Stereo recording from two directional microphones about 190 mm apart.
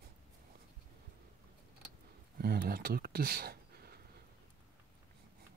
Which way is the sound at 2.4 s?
55° right (ahead or behind).